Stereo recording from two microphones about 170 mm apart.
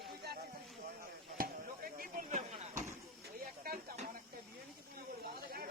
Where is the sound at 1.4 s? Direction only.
55° right (ahead or behind).